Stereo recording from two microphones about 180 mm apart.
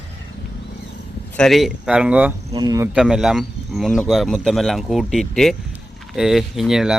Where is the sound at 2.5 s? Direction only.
20° right (ahead or behind).